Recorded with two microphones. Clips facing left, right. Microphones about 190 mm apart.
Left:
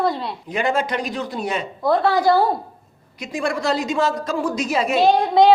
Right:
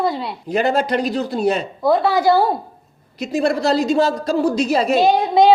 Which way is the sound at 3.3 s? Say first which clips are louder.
Right 5 dB; 35° right (ahead or behind).